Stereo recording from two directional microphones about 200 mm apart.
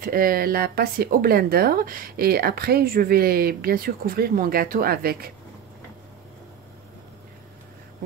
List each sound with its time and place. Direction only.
0.0 s speech: 45° right (ahead or behind)